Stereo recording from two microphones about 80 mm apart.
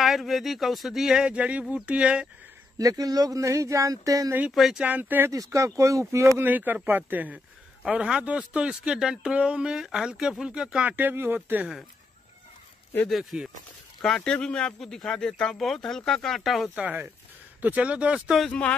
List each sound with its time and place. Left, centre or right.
0.0 s speech: centre
2.8 s speech: right
4.6 s speech: centre
4.8 s speech: right
5.3 s speech: right
6.4 s speech: right
7.8 s speech: centre
10.9 s speech: right
13.1 s speech: centre
14.0 s speech: centre
16.7 s speech: centre
18.5 s speech: centre